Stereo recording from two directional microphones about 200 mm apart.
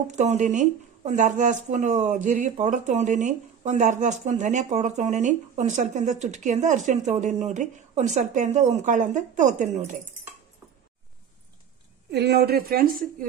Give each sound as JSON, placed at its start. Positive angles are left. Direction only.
{"t": 0.1, "sound": "speech", "side_deg": -35}
{"t": 12.1, "sound": "a woman's voice", "side_deg": -55}